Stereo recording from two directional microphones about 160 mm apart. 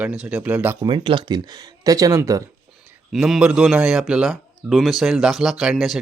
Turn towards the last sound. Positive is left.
turn(degrees=0)  # may be behind; listen again after turning